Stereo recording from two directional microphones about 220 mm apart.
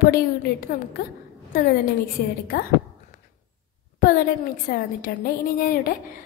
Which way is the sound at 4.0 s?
40° left (ahead or behind).